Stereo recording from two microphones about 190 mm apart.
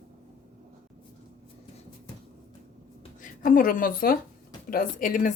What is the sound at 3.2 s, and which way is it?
A woman's voice, 45° left (ahead or behind).